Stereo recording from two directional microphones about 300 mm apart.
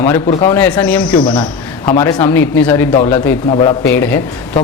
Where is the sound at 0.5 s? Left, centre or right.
Centre.